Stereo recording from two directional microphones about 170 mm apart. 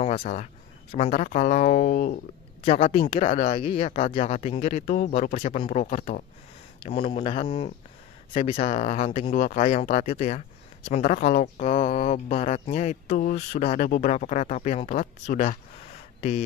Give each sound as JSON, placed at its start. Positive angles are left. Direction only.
{"t": 0.1, "sound": "speech", "side_deg": 50}
{"t": 0.9, "sound": "speech", "side_deg": 40}
{"t": 3.3, "sound": "speech", "side_deg": 45}
{"t": 3.5, "sound": "speech", "side_deg": 30}